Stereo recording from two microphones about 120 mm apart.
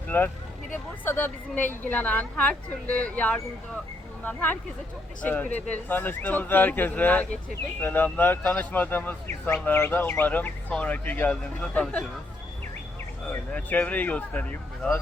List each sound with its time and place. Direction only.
0.1 s a woman's voice: 20° left (ahead or behind)
13.3 s a woman's voice: 15° left (ahead or behind)